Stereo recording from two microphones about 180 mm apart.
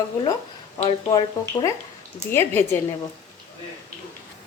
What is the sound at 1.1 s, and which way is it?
Speech, 20° left (ahead or behind).